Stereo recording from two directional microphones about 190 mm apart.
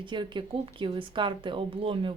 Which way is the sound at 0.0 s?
25° right (ahead or behind).